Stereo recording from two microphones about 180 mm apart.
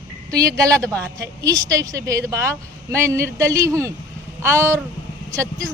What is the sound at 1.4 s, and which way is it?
A woman's voice, 20° right (ahead or behind).